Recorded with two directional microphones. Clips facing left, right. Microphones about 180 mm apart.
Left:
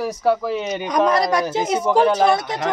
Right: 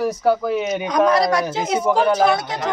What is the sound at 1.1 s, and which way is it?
Speech, 20° left (ahead or behind).